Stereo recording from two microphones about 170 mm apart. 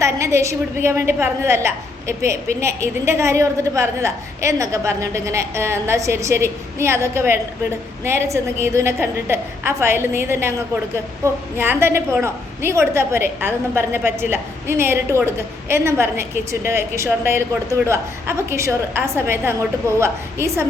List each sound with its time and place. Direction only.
0.0 s a woman's voice: 15° right (ahead or behind)